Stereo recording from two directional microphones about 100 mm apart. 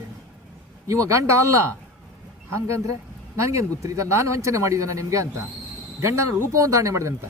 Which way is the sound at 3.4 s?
30° right (ahead or behind).